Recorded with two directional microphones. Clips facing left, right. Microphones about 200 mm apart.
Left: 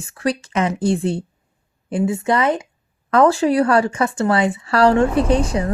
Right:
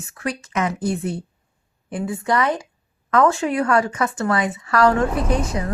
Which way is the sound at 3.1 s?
35° left (ahead or behind).